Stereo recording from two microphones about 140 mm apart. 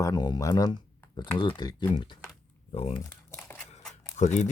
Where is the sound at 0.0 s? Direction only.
30° left (ahead or behind).